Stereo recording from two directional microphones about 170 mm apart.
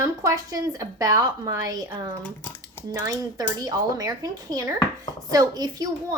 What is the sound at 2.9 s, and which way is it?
A woman's voice, 20° right (ahead or behind).